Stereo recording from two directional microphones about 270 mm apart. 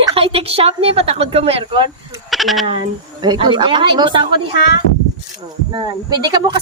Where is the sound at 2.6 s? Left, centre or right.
Centre.